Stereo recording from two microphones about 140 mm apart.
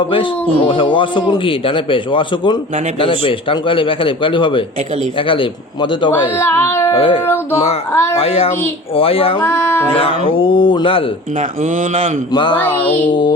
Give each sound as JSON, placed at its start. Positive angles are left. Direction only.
{"t": 0.7, "sound": "a man's voice", "side_deg": 35}
{"t": 6.3, "sound": "speech", "side_deg": 20}
{"t": 6.9, "sound": "a man's voice", "side_deg": 40}
{"t": 9.4, "sound": "a sound", "side_deg": 15}
{"t": 10.0, "sound": "a man's voice", "side_deg": 40}
{"t": 11.3, "sound": "speech", "side_deg": -65}
{"t": 12.3, "sound": "a man's voice", "side_deg": 35}